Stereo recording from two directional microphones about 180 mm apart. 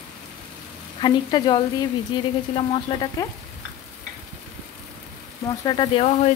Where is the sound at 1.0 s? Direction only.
25° left (ahead or behind).